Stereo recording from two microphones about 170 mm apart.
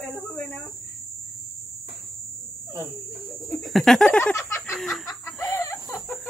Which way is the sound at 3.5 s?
Centre (ahead or behind).